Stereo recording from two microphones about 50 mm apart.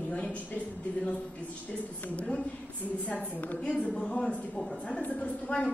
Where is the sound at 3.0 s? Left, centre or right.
Left.